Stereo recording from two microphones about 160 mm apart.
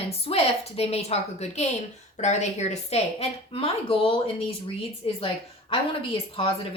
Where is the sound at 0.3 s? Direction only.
40° left (ahead or behind).